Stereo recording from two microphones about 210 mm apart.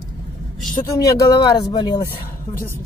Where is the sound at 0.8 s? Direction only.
15° left (ahead or behind).